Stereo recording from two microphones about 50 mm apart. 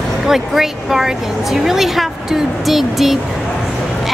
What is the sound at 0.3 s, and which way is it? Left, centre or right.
A woman's voice, centre.